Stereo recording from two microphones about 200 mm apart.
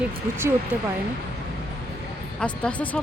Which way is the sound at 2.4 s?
5° left (ahead or behind).